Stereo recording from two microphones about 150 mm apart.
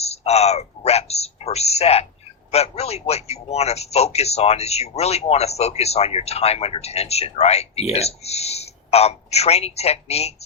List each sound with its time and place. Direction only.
0.0 s a man's voice: 45° left (ahead or behind)